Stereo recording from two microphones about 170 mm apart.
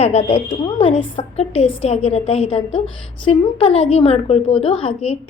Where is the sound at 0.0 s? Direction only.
40° left (ahead or behind).